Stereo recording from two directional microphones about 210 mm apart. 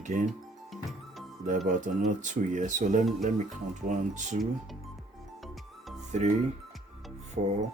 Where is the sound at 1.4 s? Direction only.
35° right (ahead or behind).